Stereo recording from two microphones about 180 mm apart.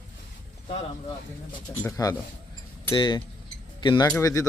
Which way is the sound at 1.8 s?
20° left (ahead or behind).